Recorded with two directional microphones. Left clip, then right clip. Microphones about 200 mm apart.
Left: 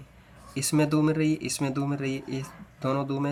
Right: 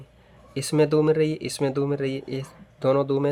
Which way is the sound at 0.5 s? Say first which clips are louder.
Right 5 dB; 30° right (ahead or behind).